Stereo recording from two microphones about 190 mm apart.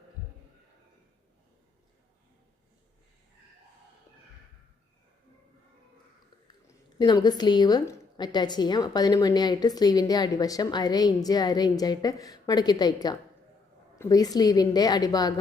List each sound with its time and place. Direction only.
7.0 s a woman's voice: 20° left (ahead or behind)